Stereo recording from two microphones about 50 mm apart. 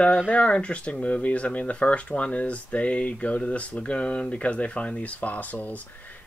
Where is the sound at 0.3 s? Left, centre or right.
Left.